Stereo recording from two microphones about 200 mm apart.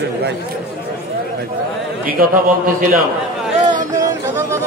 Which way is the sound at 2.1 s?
45° right (ahead or behind).